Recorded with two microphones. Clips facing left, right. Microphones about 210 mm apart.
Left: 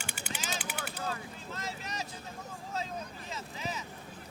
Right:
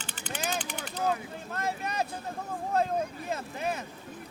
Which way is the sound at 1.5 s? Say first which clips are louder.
Right 9 dB; 60° right (ahead or behind).